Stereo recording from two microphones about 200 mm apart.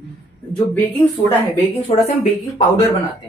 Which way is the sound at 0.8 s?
10° left (ahead or behind).